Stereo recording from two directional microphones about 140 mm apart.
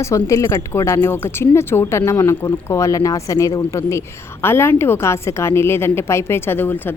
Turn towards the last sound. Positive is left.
turn(degrees=15)  # may be behind; listen again after turning